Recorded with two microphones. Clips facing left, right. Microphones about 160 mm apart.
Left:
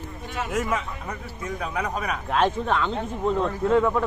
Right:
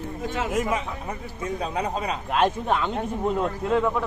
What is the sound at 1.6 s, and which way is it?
Speech, 30° right (ahead or behind).